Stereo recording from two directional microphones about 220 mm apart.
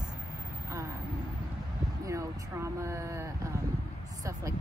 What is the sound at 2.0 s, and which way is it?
Speech, 15° right (ahead or behind).